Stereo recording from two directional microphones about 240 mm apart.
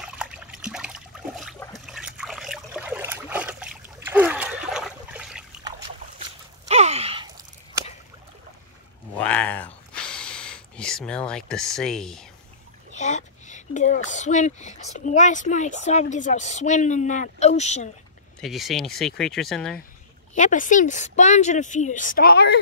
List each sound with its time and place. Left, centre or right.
0.0 s water: centre
1.9 s trickle: centre
5.6 s trickle: centre
6.7 s gasp: right
9.1 s a sound: centre
12.9 s speech: left
18.4 s speech: centre
20.3 s speech: left